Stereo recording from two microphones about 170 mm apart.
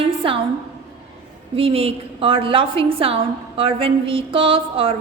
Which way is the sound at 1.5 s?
35° right (ahead or behind).